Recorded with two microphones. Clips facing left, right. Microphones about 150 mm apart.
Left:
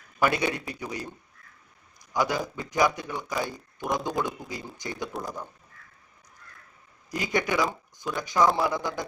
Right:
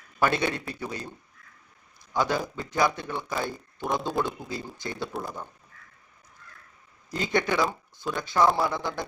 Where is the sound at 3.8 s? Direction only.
Centre (ahead or behind).